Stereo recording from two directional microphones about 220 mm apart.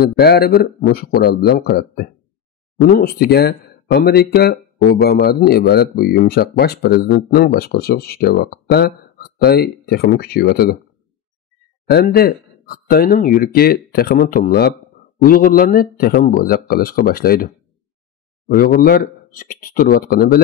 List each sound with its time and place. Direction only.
0.0 s speech: 45° left (ahead or behind)
11.9 s a man's voice: 45° left (ahead or behind)
18.5 s a man's voice: 40° left (ahead or behind)